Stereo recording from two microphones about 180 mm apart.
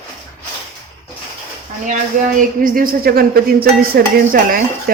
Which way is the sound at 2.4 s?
50° right (ahead or behind).